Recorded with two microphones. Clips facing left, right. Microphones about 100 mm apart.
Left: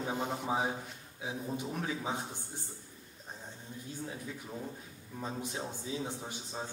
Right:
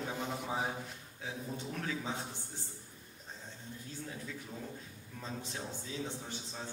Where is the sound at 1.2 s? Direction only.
15° left (ahead or behind).